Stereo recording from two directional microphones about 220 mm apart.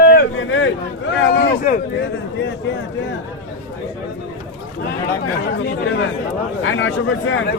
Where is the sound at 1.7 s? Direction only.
40° left (ahead or behind).